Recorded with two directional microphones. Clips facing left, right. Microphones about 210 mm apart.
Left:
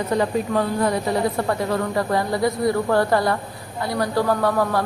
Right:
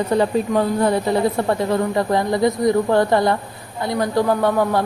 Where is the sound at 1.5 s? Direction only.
25° right (ahead or behind).